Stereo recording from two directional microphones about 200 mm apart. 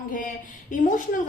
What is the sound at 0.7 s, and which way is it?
Speech, 40° left (ahead or behind).